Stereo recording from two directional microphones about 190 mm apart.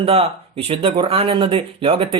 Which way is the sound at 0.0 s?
30° right (ahead or behind).